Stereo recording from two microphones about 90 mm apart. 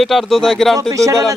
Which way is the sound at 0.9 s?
40° right (ahead or behind).